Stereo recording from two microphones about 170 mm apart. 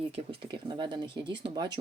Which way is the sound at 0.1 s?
30° right (ahead or behind).